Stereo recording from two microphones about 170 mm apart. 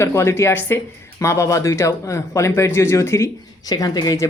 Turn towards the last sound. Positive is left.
turn(degrees=20)  # may be behind; listen again after turning